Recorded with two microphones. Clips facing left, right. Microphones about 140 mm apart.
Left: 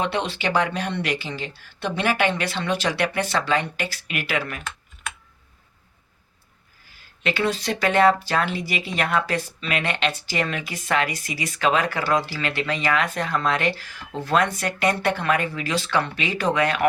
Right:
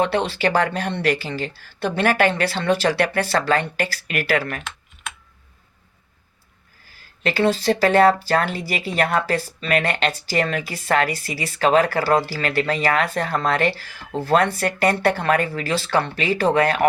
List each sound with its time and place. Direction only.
0.0 s speech: 35° right (ahead or behind)
7.2 s speech: 40° right (ahead or behind)